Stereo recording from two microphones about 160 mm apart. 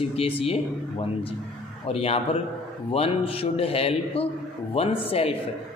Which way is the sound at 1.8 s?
35° left (ahead or behind).